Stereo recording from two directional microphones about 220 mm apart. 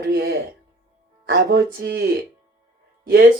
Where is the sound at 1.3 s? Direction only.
45° right (ahead or behind).